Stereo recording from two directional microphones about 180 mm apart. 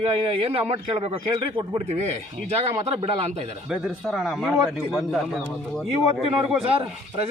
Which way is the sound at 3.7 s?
Centre (ahead or behind).